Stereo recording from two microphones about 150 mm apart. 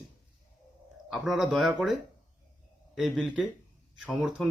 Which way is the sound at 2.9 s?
5° right (ahead or behind).